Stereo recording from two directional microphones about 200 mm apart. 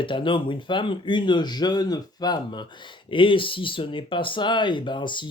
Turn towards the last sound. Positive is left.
turn(degrees=25)  # may be behind; listen again after turning